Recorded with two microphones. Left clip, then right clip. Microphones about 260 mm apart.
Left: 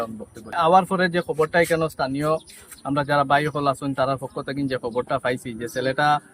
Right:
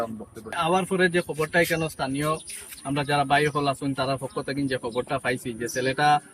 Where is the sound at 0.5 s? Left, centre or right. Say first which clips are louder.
Left 7 dB; centre.